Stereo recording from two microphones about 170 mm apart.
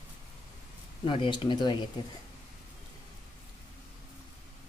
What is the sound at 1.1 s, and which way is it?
Speech, 30° left (ahead or behind).